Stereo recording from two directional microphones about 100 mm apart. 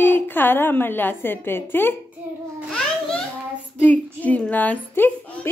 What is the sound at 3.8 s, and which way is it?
A woman's voice, 15° left (ahead or behind).